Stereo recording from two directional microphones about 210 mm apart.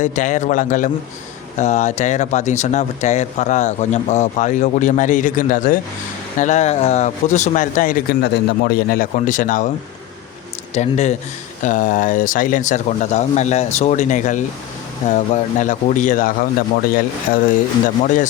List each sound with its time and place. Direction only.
0.0 s speech: 35° left (ahead or behind)
10.8 s speech: 35° left (ahead or behind)
17.8 s speech: 35° left (ahead or behind)